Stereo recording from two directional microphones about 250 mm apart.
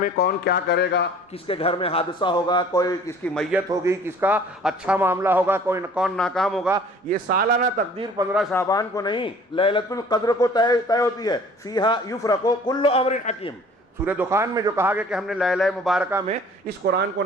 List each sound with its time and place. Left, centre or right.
0.0 s speech: left
1.5 s a man's voice: left
3.7 s a man's voice: centre
7.1 s a man's voice: right
8.3 s a man's voice: centre
8.5 s speech: centre
14.0 s a man's voice: centre
17.2 s speech: right